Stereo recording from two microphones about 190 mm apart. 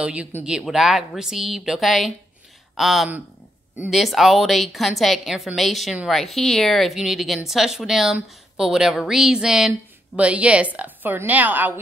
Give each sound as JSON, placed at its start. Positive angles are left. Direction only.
{"t": 0.0, "sound": "a woman's voice", "side_deg": -5}